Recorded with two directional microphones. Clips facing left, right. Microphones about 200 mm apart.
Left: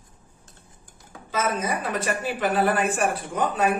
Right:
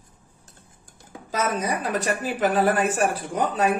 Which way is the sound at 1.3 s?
40° right (ahead or behind).